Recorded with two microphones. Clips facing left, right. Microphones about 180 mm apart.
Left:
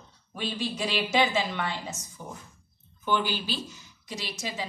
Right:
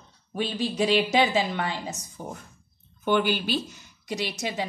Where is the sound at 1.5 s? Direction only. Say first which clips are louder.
Right 3 dB; 45° right (ahead or behind).